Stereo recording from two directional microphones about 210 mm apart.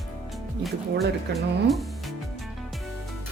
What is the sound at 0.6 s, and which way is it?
Speech, centre (ahead or behind).